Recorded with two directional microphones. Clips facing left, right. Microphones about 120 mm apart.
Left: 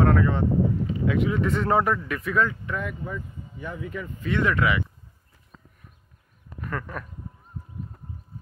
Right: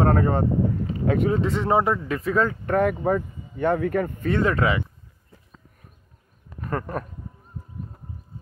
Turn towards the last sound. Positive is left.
turn(degrees=-40)  # may be behind; listen again after turning